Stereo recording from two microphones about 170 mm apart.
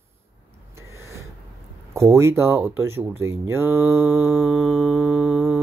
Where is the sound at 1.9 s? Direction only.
15° right (ahead or behind).